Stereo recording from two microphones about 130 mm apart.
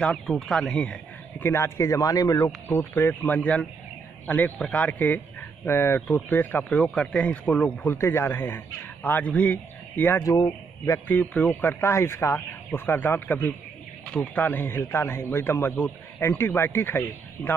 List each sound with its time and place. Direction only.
0.0 s speech: 5° left (ahead or behind)
1.4 s speech: 20° left (ahead or behind)
10.3 s speech: 30° left (ahead or behind)
11.1 s speech: 15° left (ahead or behind)